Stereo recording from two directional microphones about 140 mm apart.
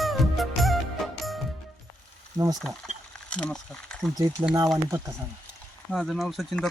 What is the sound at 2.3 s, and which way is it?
Speech, 25° right (ahead or behind).